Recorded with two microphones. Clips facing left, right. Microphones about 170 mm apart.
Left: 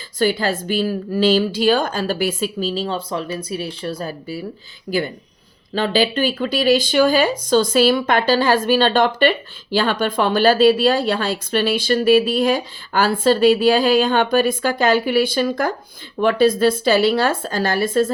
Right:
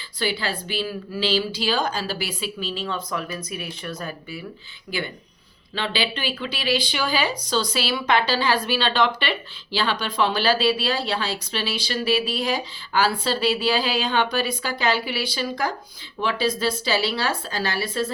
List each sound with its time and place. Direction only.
0.2 s a woman's voice: 45° left (ahead or behind)